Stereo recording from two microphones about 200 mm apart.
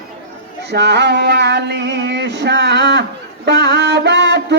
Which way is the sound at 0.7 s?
55° right (ahead or behind).